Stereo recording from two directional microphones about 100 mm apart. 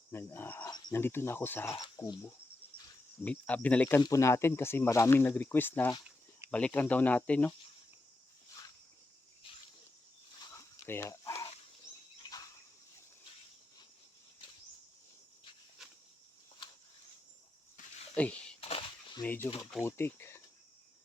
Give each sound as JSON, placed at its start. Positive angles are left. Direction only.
{"t": 0.1, "sound": "cricket", "side_deg": 25}
{"t": 0.7, "sound": "cricket", "side_deg": 45}
{"t": 0.9, "sound": "speech", "side_deg": 25}
{"t": 1.8, "sound": "speech", "side_deg": 40}
{"t": 3.2, "sound": "speech", "side_deg": 15}
{"t": 4.0, "sound": "speech", "side_deg": 30}
{"t": 9.5, "sound": "cricket", "side_deg": 65}
{"t": 10.5, "sound": "a sound", "side_deg": 25}
{"t": 11.1, "sound": "a sound", "side_deg": 35}
{"t": 18.1, "sound": "a sound", "side_deg": 10}
{"t": 18.6, "sound": "a sound", "side_deg": 70}
{"t": 19.2, "sound": "speech", "side_deg": 15}